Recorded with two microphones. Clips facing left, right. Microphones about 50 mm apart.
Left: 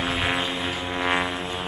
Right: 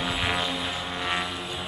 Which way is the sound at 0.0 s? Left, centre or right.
Left.